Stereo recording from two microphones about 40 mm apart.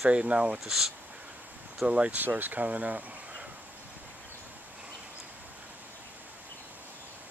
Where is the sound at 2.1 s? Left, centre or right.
Right.